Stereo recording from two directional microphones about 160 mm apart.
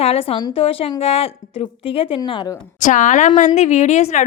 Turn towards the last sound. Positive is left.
turn(degrees=45)  # may be behind; listen again after turning